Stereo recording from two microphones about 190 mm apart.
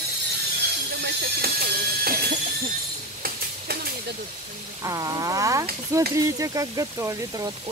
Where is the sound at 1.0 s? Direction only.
55° right (ahead or behind).